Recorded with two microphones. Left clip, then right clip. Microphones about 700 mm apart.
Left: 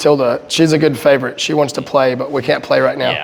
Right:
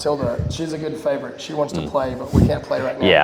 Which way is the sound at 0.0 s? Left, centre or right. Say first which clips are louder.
Left 9 dB; left.